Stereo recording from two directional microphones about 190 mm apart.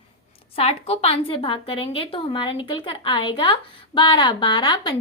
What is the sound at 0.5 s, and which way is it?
Speech, 30° left (ahead or behind).